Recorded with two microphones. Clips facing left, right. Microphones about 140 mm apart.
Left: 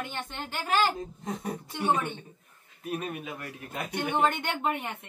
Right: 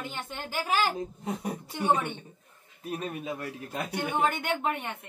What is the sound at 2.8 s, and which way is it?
Speech, 30° right (ahead or behind).